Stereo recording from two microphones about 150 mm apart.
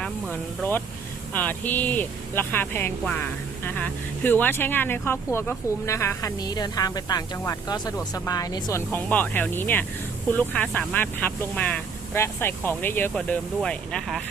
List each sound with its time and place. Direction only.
0.0 s hiss: 10° left (ahead or behind)
1.3 s speech: 10° left (ahead or behind)
8.9 s speech: 10° left (ahead or behind)